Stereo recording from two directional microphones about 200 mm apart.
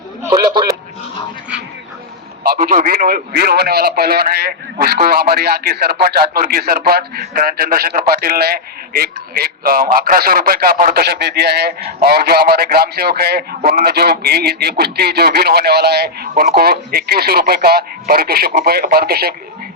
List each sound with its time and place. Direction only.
0.2 s speech: 20° right (ahead or behind)
2.4 s a man's voice: 45° right (ahead or behind)